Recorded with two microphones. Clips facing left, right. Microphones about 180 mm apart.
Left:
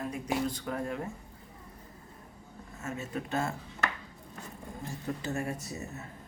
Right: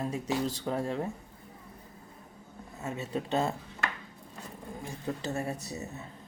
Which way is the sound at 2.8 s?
20° right (ahead or behind).